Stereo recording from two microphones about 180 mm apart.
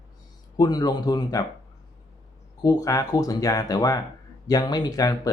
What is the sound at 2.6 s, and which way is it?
Speech, 20° left (ahead or behind).